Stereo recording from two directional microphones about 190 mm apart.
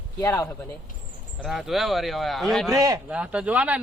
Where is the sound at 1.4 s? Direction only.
Centre (ahead or behind).